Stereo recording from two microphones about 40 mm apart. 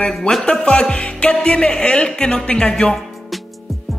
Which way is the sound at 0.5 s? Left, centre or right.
Left.